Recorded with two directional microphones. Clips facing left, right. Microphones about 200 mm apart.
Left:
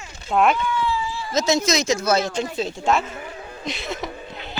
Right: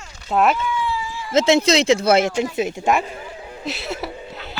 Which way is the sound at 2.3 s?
20° right (ahead or behind).